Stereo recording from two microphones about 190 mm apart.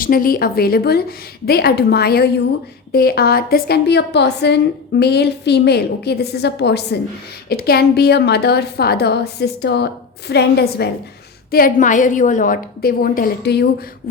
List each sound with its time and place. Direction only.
0.0 s a woman's voice: 50° left (ahead or behind)
11.5 s a woman's voice: 45° left (ahead or behind)